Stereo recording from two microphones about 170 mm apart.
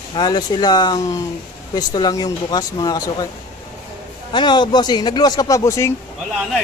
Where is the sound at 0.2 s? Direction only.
25° left (ahead or behind).